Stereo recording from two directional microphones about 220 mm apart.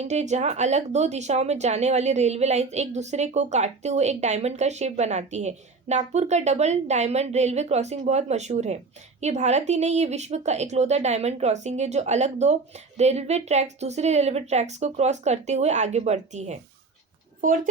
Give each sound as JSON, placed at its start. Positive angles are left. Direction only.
{"t": 0.1, "sound": "a child's voice", "side_deg": -30}